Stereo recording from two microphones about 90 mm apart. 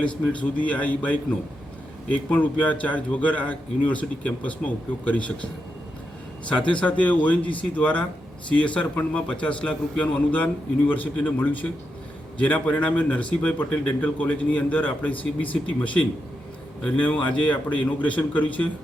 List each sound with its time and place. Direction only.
0.0 s speech: 15° left (ahead or behind)
2.3 s speech: 15° left (ahead or behind)
6.6 s speech: 15° left (ahead or behind)